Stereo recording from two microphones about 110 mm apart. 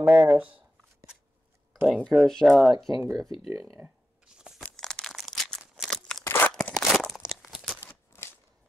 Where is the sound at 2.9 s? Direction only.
30° right (ahead or behind).